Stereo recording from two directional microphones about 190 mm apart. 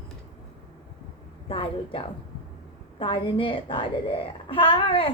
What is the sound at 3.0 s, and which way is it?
A woman's voice, 25° left (ahead or behind).